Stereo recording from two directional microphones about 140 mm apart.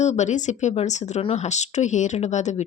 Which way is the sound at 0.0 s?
55° left (ahead or behind).